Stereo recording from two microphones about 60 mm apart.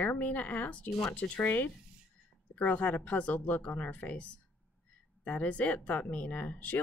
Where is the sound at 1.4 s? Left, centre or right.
Left.